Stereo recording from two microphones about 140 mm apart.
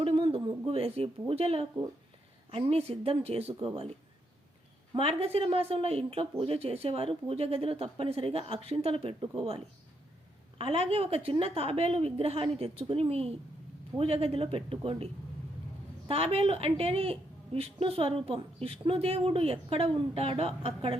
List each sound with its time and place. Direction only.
0.0 s a sound: 40° right (ahead or behind)
1.3 s a woman's voice: 45° right (ahead or behind)
4.9 s a woman's voice: 45° right (ahead or behind)
10.6 s a woman's voice: 45° right (ahead or behind)